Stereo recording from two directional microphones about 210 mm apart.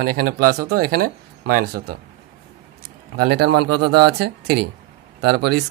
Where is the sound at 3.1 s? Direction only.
50° right (ahead or behind).